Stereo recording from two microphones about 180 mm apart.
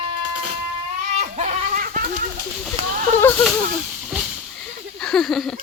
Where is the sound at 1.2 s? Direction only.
40° right (ahead or behind).